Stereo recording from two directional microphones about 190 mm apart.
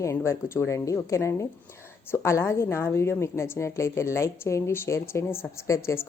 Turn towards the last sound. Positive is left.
turn(degrees=15)  # may be behind; listen again after turning